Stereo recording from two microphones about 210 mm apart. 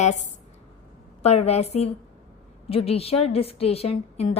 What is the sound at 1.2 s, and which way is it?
A woman's voice, 30° left (ahead or behind).